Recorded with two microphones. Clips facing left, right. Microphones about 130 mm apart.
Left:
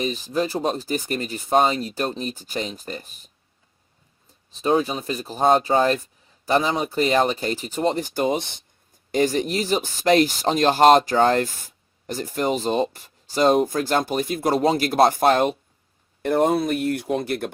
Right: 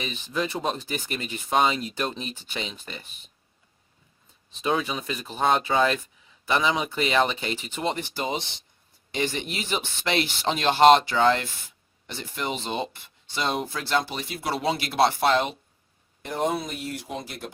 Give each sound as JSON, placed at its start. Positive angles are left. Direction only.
{"t": 0.0, "sound": "speech", "side_deg": 40}
{"t": 4.5, "sound": "speech", "side_deg": 35}
{"t": 9.1, "sound": "speech", "side_deg": 40}